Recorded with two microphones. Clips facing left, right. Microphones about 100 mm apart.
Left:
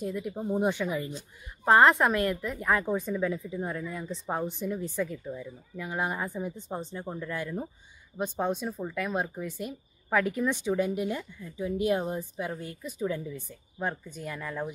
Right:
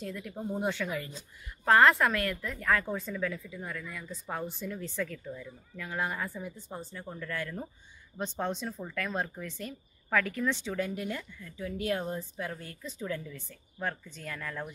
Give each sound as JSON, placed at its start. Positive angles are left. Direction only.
{"t": 0.0, "sound": "a woman's voice", "side_deg": 20}